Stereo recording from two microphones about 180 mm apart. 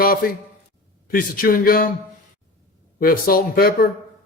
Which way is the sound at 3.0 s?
55° left (ahead or behind).